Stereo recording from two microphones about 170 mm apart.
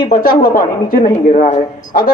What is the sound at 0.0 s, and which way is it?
Speech, 55° left (ahead or behind).